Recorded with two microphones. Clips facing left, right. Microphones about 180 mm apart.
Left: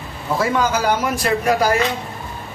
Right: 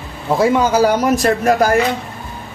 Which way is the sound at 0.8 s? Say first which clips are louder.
Right 5 dB; 40° right (ahead or behind).